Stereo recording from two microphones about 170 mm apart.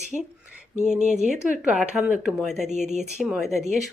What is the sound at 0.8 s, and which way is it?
Speech, 40° right (ahead or behind).